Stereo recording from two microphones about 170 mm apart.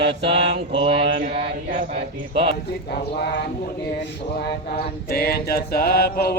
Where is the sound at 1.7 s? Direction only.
50° right (ahead or behind).